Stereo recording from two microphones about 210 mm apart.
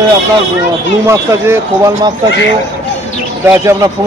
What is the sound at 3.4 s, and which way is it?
Speech, 10° right (ahead or behind).